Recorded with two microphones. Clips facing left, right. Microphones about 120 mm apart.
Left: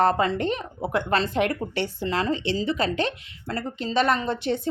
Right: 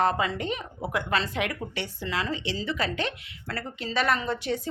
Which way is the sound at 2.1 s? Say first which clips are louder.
Left 5 dB; 45° left (ahead or behind).